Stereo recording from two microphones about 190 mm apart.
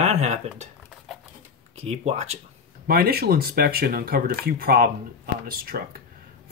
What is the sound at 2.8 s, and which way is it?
Speech, 50° right (ahead or behind).